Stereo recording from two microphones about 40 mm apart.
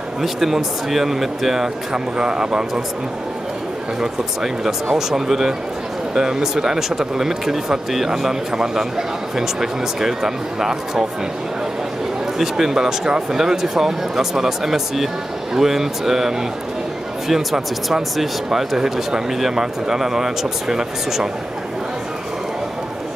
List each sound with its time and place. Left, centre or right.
0.2 s speech: centre
2.1 s speech: centre
4.0 s speech: centre
12.4 s speech: centre